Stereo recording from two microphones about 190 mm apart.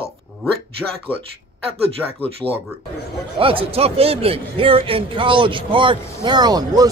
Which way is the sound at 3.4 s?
30° right (ahead or behind).